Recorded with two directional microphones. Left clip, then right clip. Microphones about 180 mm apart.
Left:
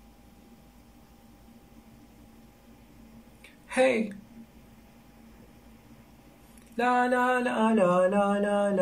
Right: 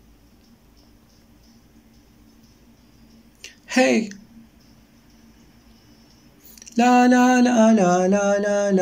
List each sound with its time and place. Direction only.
3.6 s speech: 35° right (ahead or behind)
6.8 s mantra: 35° right (ahead or behind)